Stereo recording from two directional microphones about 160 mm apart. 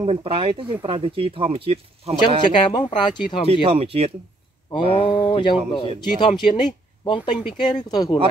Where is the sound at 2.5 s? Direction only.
30° left (ahead or behind).